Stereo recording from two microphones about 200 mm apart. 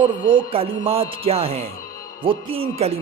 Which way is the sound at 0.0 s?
25° right (ahead or behind).